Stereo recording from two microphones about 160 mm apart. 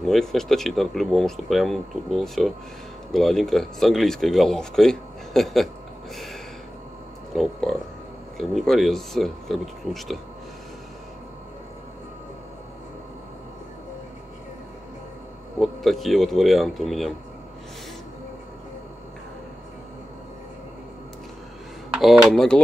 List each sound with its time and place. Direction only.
0.0 s speech: centre (ahead or behind)
7.3 s speech: centre (ahead or behind)
15.6 s speech: centre (ahead or behind)
21.9 s speech: centre (ahead or behind)